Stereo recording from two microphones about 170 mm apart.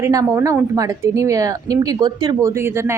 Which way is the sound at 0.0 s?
20° right (ahead or behind).